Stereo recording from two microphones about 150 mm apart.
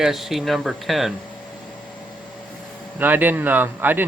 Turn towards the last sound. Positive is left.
turn(degrees=-15)  # may be behind; listen again after turning